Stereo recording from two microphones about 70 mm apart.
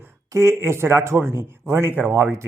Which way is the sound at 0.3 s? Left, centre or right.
Right.